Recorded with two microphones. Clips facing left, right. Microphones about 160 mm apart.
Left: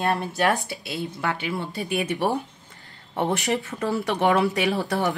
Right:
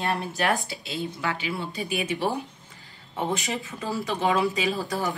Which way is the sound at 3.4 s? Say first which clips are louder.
Left 6 dB; 70° left (ahead or behind).